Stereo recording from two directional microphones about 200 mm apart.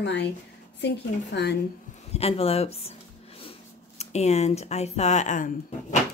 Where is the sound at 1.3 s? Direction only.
60° left (ahead or behind).